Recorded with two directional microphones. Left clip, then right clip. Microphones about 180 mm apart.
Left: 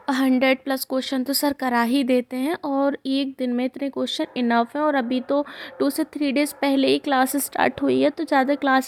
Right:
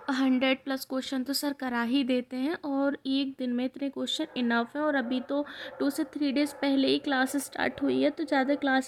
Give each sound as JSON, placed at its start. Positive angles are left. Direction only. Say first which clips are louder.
{"t": 0.1, "sound": "speech", "louder": "left 7 dB", "side_deg": 35}